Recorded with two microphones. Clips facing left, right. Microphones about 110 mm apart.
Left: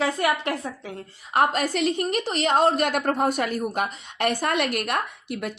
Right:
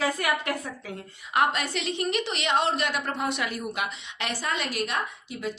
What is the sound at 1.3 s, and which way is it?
A woman's voice, 40° left (ahead or behind).